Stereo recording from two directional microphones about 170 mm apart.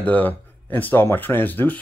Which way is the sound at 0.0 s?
10° left (ahead or behind).